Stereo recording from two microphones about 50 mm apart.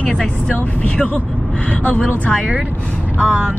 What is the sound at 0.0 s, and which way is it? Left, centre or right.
Speech, left.